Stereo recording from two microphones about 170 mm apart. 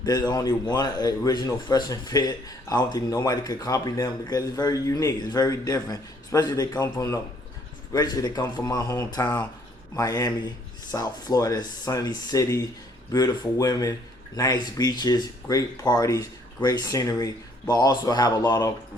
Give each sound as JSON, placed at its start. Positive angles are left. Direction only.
{"t": 0.0, "sound": "speech", "side_deg": 20}